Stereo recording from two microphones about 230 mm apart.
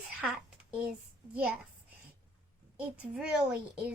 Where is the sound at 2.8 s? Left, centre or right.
Centre.